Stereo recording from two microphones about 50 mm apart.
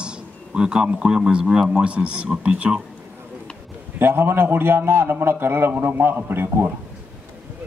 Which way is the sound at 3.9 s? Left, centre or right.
Right.